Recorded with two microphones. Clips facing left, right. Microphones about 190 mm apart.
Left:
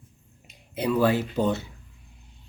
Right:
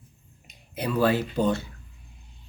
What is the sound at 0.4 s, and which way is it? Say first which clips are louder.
Speech: left 4 dB; 20° left (ahead or behind).